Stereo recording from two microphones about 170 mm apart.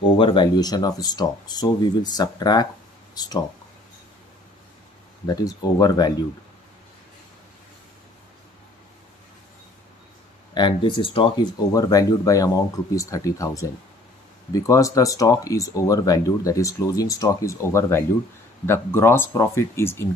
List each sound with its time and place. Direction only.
0.2 s speech: 30° left (ahead or behind)
5.2 s speech: 20° left (ahead or behind)
10.5 s speech: 30° left (ahead or behind)
11.7 s speech: 20° left (ahead or behind)